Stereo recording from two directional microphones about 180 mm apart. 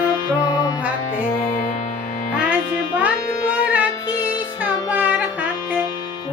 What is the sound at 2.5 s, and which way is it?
Music, 10° right (ahead or behind).